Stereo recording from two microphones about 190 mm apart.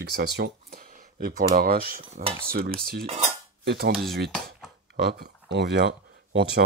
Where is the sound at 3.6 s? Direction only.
55° right (ahead or behind).